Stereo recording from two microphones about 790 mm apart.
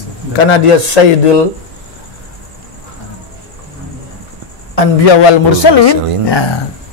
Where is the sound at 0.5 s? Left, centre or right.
Left.